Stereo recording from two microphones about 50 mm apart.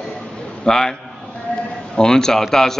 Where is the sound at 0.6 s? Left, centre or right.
Centre.